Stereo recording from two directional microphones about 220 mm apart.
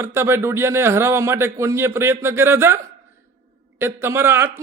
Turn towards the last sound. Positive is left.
turn(degrees=-10)  # may be behind; listen again after turning